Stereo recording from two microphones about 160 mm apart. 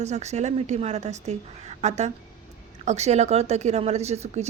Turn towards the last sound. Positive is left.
turn(degrees=-45)  # may be behind; listen again after turning